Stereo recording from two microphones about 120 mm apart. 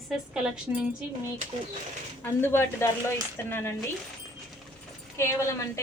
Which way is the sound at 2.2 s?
20° left (ahead or behind).